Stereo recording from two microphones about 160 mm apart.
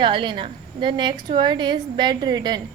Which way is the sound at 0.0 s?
30° right (ahead or behind).